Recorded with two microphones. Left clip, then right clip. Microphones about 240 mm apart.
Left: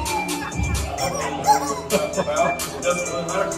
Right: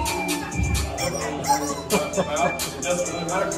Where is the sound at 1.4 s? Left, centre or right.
Centre.